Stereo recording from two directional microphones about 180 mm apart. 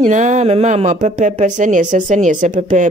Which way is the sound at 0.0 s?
40° right (ahead or behind).